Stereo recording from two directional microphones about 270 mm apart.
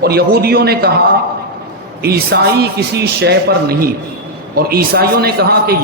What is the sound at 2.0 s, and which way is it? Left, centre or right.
A man's voice, right.